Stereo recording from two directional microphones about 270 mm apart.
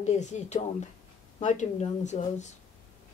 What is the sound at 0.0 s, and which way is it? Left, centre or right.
A woman's voice, left.